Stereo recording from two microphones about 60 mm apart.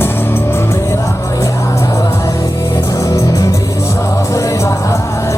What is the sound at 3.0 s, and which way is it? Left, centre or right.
Music, left.